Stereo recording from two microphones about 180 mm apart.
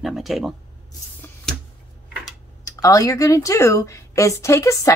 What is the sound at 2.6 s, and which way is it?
A woman's voice, 20° left (ahead or behind).